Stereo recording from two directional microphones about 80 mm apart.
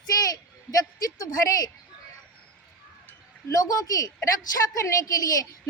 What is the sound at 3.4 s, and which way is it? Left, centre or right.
Speech, left.